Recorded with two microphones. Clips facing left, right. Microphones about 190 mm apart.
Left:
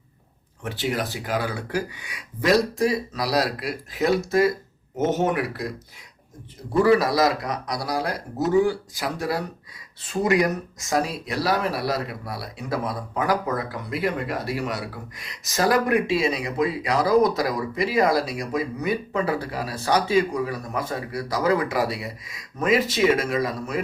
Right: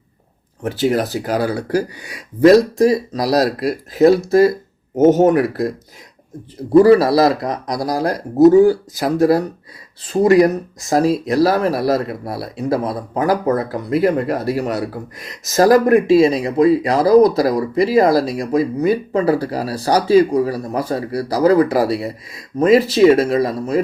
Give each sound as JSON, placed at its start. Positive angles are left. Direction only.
{"t": 0.6, "sound": "speech", "side_deg": -40}
{"t": 6.7, "sound": "speech", "side_deg": -35}